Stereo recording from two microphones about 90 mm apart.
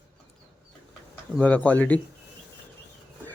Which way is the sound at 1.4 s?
15° left (ahead or behind).